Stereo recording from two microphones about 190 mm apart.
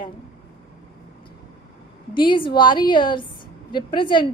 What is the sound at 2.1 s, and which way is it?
A woman's voice, 25° left (ahead or behind).